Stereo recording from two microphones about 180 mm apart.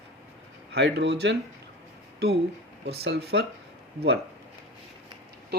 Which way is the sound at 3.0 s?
65° right (ahead or behind).